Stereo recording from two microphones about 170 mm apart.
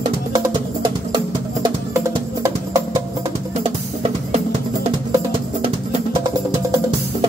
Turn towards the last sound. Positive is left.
turn(degrees=-30)  # may be behind; listen again after turning